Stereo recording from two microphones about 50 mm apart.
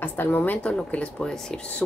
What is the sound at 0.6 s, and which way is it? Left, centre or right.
Speech, left.